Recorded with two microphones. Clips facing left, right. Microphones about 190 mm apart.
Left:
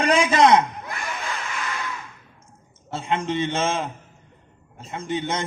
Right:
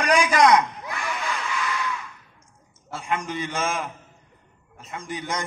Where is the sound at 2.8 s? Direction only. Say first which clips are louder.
Left 3 dB; 25° left (ahead or behind).